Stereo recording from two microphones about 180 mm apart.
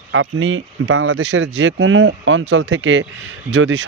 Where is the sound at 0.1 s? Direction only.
90° right.